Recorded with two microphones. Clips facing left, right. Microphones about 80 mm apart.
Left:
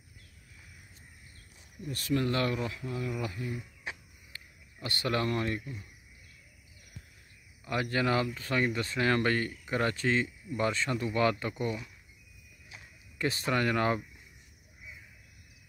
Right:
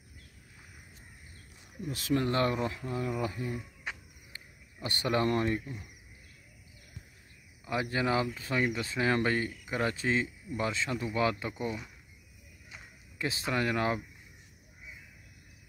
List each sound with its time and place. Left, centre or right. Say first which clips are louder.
2.1 s speech: right 1 dB; right
4.7 s speech: right 2 dB; right
7.6 s speech: left 1 dB; centre
13.2 s speech: left 2 dB; centre